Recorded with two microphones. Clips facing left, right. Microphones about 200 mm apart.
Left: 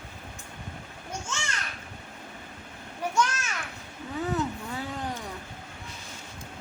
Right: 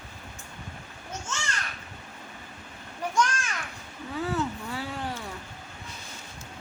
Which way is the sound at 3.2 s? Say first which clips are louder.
Right 1 dB; 10° left (ahead or behind).